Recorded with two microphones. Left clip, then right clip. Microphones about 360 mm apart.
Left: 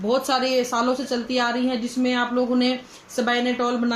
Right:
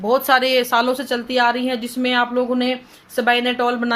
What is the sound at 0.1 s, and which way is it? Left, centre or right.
A woman's voice, right.